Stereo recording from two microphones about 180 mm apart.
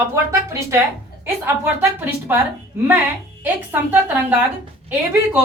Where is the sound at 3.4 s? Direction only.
10° right (ahead or behind).